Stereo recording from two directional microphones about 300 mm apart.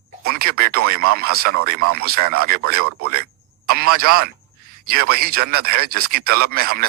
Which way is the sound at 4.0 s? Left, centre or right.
Right.